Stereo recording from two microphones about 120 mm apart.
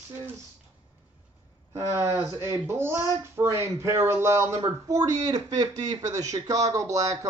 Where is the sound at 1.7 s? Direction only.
25° right (ahead or behind).